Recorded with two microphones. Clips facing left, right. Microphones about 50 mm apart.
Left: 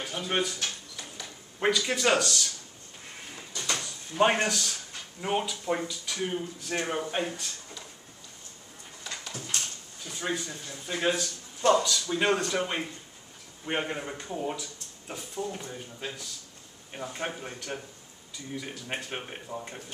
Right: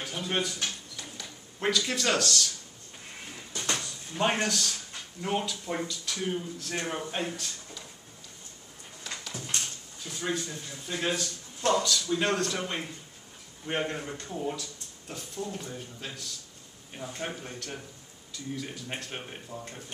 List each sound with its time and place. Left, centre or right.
0.0 s speech: centre
0.9 s a sound: centre
3.7 s drawer open or close: centre
4.2 s speech: centre
9.0 s a sound: centre
10.0 s speech: centre